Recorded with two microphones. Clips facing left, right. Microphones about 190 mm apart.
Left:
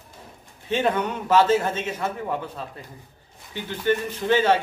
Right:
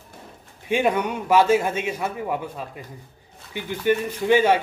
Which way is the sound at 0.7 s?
10° right (ahead or behind).